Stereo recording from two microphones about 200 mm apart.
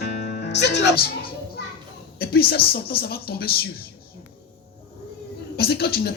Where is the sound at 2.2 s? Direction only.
50° left (ahead or behind).